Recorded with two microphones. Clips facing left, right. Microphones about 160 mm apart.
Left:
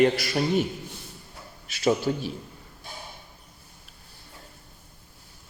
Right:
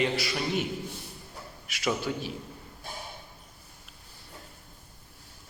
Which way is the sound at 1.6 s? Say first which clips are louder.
Left 6 dB; 30° left (ahead or behind).